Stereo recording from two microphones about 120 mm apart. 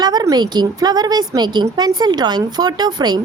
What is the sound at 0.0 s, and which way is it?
A woman's voice, 35° right (ahead or behind).